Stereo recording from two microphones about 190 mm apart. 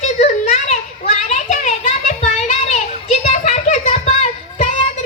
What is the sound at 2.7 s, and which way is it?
Children playing, 35° left (ahead or behind).